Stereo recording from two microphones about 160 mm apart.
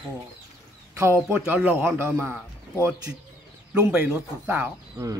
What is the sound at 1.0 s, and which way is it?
Speech, 15° right (ahead or behind).